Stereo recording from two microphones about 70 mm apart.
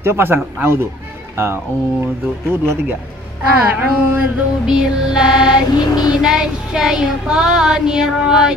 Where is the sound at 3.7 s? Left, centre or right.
Right.